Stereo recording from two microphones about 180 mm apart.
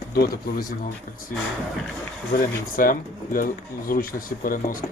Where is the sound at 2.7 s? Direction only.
50° left (ahead or behind).